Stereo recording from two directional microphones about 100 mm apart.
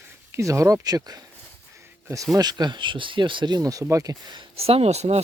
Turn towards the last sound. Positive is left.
turn(degrees=-90)